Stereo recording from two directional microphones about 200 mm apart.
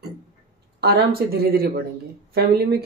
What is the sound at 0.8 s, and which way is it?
Speech, 50° right (ahead or behind).